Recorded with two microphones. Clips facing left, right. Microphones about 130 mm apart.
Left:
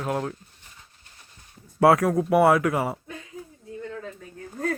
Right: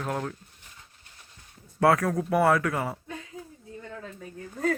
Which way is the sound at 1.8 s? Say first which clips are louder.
Left 4 dB; 20° left (ahead or behind).